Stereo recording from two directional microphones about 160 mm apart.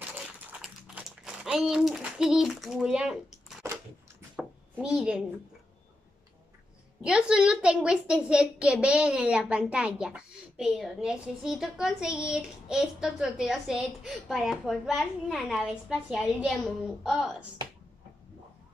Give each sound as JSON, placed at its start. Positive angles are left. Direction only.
{"t": 0.5, "sound": "typing", "side_deg": -5}
{"t": 4.4, "sound": "a sound", "side_deg": 5}
{"t": 7.0, "sound": "a woman's voice", "side_deg": -5}